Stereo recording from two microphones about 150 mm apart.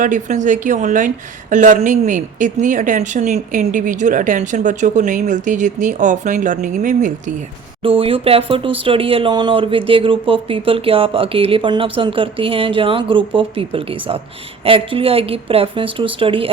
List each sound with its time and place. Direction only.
0.0 s a woman's voice: 55° right (ahead or behind)
7.8 s speech: 40° right (ahead or behind)